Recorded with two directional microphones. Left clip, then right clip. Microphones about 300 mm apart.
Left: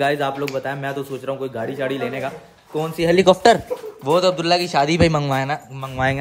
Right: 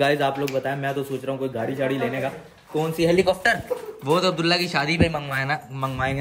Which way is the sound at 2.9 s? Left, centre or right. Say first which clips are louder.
Left 3 dB; left.